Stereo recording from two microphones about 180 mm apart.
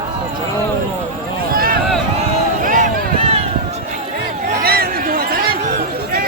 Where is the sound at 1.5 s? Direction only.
55° right (ahead or behind).